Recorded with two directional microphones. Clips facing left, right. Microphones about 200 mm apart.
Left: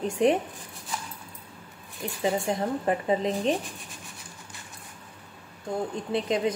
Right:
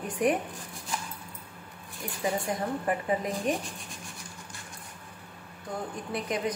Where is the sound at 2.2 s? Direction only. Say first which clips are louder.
Left 3 dB; 25° left (ahead or behind).